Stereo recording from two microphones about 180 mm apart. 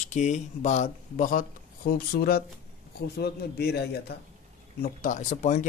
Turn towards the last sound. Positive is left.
turn(degrees=45)  # may be behind; listen again after turning